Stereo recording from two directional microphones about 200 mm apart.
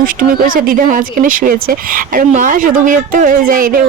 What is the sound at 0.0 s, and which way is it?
Speech, 45° right (ahead or behind).